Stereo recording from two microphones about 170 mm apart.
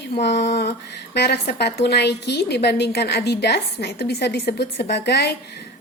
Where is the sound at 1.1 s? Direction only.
75° left (ahead or behind).